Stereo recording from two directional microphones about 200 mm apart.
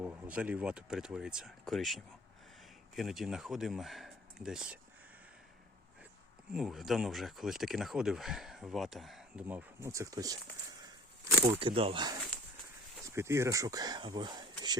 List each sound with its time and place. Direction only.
0.0 s speech: 5° right (ahead or behind)
6.5 s speech: centre (ahead or behind); by 10.3 s 15° right (ahead or behind)
11.4 s speech: 25° right (ahead or behind)